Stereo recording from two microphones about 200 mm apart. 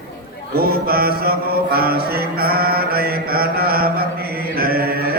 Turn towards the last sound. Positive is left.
turn(degrees=-50)  # may be behind; listen again after turning